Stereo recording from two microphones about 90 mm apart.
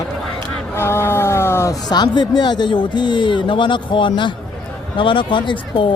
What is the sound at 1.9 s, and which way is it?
Speech, 55° left (ahead or behind).